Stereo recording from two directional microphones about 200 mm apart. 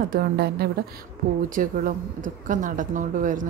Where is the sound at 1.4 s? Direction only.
40° right (ahead or behind).